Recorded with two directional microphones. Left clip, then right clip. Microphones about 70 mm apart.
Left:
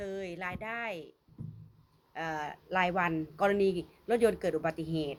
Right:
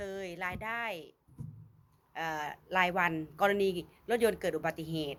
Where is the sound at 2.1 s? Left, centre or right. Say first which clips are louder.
Even; centre.